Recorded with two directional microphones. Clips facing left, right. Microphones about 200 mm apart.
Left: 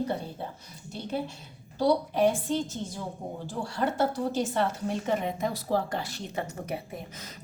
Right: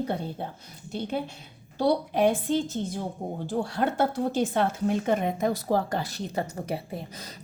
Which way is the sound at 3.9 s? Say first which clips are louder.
Right 2 dB; 55° right (ahead or behind).